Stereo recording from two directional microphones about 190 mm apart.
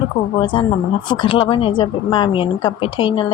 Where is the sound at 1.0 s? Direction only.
25° left (ahead or behind).